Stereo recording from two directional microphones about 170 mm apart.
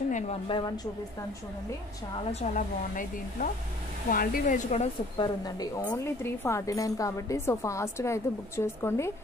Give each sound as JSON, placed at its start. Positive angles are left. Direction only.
{"t": 0.5, "sound": "speech", "side_deg": 30}
{"t": 2.4, "sound": "speech", "side_deg": 50}
{"t": 5.1, "sound": "speech", "side_deg": 25}
{"t": 5.8, "sound": "a woman's voice", "side_deg": 15}